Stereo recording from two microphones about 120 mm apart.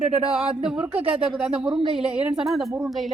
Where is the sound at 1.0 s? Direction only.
50° right (ahead or behind).